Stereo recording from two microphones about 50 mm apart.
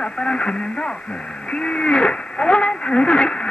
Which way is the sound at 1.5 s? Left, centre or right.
Left.